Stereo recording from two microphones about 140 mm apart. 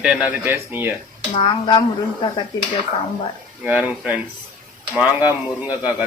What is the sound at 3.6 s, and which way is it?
Speech, 10° right (ahead or behind).